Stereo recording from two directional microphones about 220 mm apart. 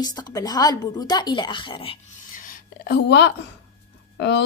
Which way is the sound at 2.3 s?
40° left (ahead or behind).